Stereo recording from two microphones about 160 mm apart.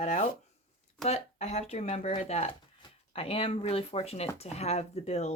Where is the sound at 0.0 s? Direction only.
45° left (ahead or behind).